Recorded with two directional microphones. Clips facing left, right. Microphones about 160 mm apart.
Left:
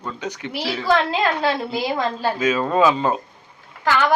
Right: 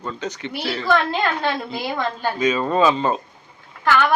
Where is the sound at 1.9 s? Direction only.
5° left (ahead or behind).